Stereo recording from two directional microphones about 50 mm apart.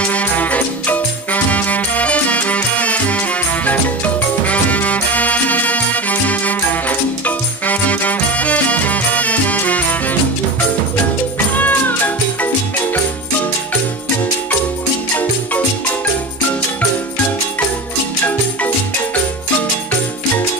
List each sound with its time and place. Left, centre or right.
0.0 s music: left
11.3 s music: left